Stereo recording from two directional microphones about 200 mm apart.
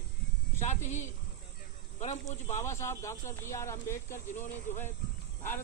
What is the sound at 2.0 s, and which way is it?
Speech, 35° left (ahead or behind).